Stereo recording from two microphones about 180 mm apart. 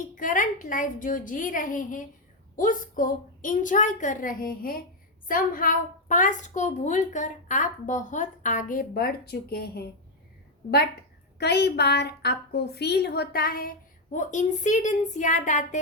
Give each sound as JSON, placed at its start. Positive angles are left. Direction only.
{"t": 0.2, "sound": "a woman's voice", "side_deg": 45}
{"t": 14.1, "sound": "a woman's voice", "side_deg": 45}